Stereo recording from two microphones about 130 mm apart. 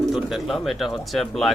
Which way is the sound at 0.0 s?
Centre (ahead or behind).